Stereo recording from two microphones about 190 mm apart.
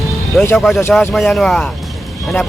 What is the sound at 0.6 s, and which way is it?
Speech, centre (ahead or behind).